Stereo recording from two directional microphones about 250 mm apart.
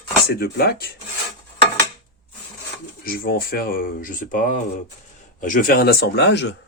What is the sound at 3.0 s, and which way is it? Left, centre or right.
Speech, left.